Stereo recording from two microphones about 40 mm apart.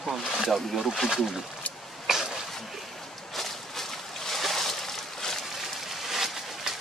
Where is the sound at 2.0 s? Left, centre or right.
Centre.